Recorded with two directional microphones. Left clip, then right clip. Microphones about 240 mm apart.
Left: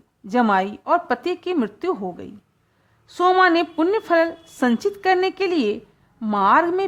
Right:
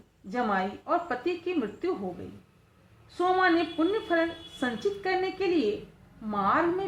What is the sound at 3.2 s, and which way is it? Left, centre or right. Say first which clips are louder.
A woman's voice: left 8 dB; left.